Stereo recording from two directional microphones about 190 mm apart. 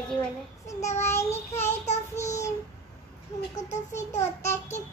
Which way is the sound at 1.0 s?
15° left (ahead or behind).